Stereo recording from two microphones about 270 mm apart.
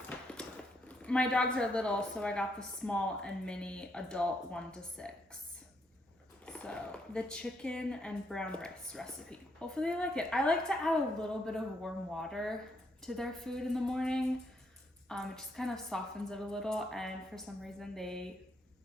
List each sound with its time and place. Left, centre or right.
0.9 s speech: centre
6.4 s speech: centre